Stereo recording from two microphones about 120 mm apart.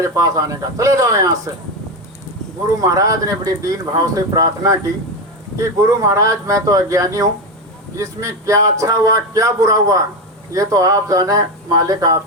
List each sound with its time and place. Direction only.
0.0 s speech: 25° right (ahead or behind)
2.8 s speech: 30° right (ahead or behind)